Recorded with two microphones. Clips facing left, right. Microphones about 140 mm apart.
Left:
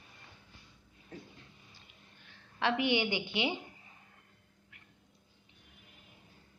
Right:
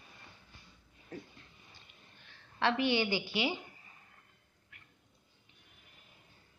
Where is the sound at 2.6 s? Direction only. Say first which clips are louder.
Even; 15° left (ahead or behind).